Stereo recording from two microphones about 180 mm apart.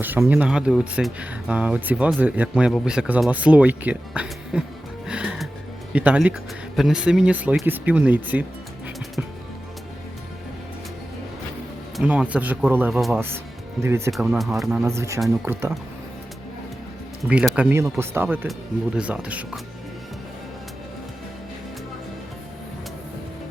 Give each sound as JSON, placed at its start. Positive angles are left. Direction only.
{"t": 0.0, "sound": "speech", "side_deg": -10}
{"t": 5.0, "sound": "music", "side_deg": -5}
{"t": 5.9, "sound": "speech", "side_deg": -10}
{"t": 11.9, "sound": "speech", "side_deg": -10}
{"t": 14.1, "sound": "speech", "side_deg": 0}
{"t": 14.8, "sound": "speech", "side_deg": -15}
{"t": 17.2, "sound": "speech", "side_deg": -5}